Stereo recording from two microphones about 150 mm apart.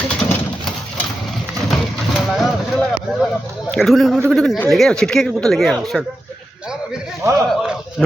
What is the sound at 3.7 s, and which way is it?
Speech, centre (ahead or behind).